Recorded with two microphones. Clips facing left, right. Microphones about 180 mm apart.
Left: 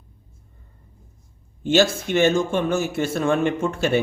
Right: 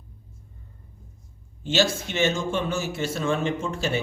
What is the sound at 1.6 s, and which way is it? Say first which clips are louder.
Speech: left 5 dB; 55° left (ahead or behind).